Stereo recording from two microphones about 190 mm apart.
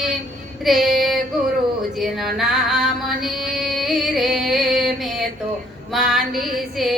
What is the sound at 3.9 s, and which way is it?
Music, centre (ahead or behind).